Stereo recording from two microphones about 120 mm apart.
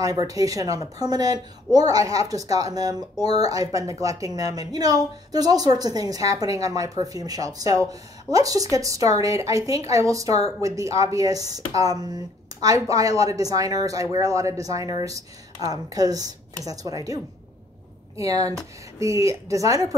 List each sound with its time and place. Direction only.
0.0 s a woman's voice: 30° right (ahead or behind)